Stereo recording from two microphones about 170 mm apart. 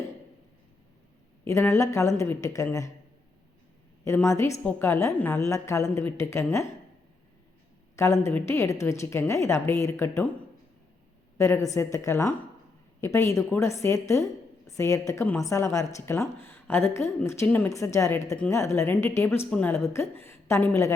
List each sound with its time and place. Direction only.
1.5 s speech: 15° left (ahead or behind)
4.0 s speech: 15° left (ahead or behind)
7.9 s speech: 15° left (ahead or behind)
11.3 s speech: 15° left (ahead or behind)